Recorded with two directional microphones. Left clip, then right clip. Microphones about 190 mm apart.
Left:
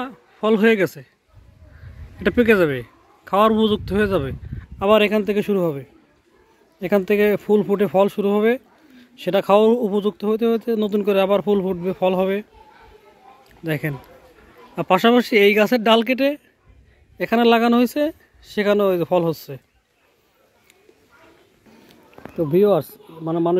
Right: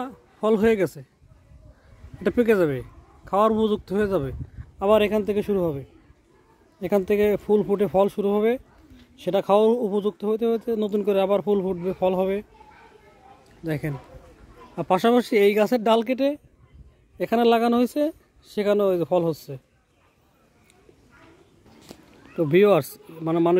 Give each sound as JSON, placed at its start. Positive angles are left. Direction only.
{"t": 0.0, "sound": "a man's voice", "side_deg": -15}
{"t": 2.2, "sound": "a man's voice", "side_deg": -5}
{"t": 13.7, "sound": "a man's voice", "side_deg": 0}
{"t": 23.2, "sound": "a man's voice", "side_deg": -20}